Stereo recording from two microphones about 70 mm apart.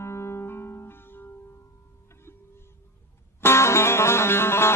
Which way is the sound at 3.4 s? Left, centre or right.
Left.